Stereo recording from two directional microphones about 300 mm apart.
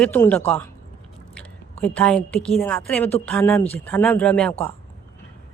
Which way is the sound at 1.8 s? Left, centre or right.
Centre.